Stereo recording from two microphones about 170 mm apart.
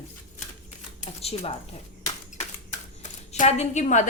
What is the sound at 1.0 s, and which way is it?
A woman's voice, 35° left (ahead or behind).